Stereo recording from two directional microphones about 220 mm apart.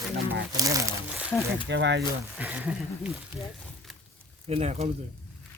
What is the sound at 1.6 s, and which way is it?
Speech, 55° right (ahead or behind).